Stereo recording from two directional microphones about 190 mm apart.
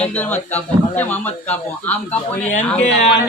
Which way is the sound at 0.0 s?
10° left (ahead or behind).